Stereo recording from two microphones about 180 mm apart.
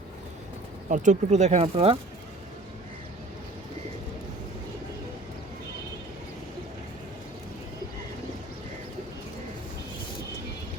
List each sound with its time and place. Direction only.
0.9 s speech: 45° right (ahead or behind)